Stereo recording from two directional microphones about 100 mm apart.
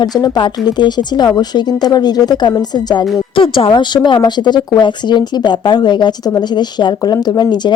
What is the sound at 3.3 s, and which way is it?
A woman's voice, 60° left (ahead or behind).